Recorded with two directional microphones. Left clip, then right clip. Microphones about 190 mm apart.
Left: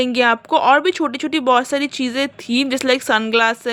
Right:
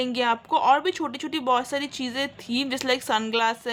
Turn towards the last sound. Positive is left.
turn(degrees=30)  # may be behind; listen again after turning